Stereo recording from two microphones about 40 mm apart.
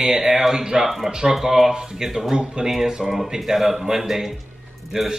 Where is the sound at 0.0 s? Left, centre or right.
Centre.